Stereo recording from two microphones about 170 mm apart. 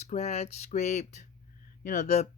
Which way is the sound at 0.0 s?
40° left (ahead or behind).